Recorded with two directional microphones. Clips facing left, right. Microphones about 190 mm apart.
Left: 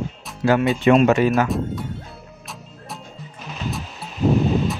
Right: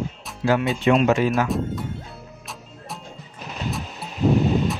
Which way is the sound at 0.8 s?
50° left (ahead or behind).